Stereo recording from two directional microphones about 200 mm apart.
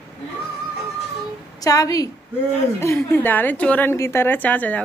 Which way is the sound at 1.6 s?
15° left (ahead or behind).